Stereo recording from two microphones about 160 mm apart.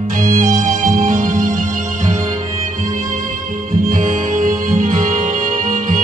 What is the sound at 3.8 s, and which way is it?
Music, 55° right (ahead or behind).